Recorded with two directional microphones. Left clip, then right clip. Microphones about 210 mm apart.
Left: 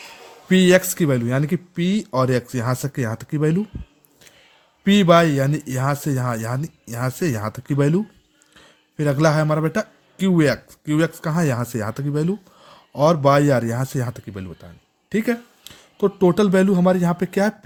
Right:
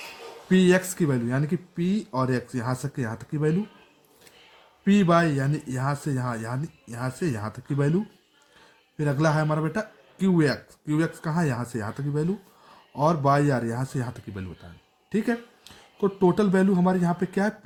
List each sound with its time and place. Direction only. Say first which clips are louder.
0.4 s a man's voice: left 6 dB; 40° left (ahead or behind)
4.9 s a man's voice: left 7 dB; 40° left (ahead or behind)